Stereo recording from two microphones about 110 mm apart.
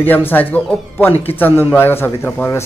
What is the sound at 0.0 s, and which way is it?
A man's voice, 15° left (ahead or behind).